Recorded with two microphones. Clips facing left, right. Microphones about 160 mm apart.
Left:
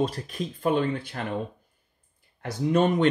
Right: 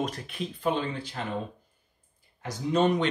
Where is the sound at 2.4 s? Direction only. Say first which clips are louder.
Left 2 dB; 55° left (ahead or behind).